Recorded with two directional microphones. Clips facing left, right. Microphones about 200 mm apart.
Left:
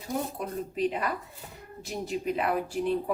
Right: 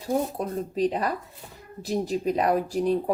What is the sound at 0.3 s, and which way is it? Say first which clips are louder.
A woman's voice: right 4 dB; 35° right (ahead or behind).